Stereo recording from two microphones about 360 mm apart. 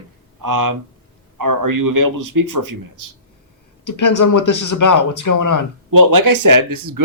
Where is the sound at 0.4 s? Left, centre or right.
Right.